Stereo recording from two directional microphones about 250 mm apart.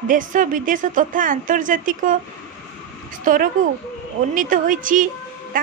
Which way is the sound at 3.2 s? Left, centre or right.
Right.